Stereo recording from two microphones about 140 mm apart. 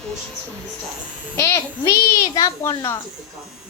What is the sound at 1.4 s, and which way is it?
A child's voice, 20° left (ahead or behind).